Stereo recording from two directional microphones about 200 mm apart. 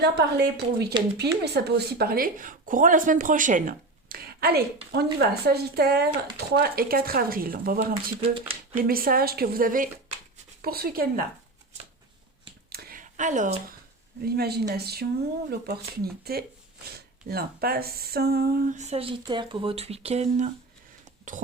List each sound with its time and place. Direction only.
0.0 s a woman's voice: 55° right (ahead or behind)
8.2 s speech: 30° right (ahead or behind)
8.7 s speech: 45° right (ahead or behind)
12.7 s a sound: 45° right (ahead or behind)
14.3 s speech: 50° right (ahead or behind)